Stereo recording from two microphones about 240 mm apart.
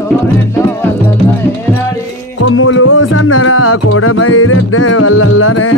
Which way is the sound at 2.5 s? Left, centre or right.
Left.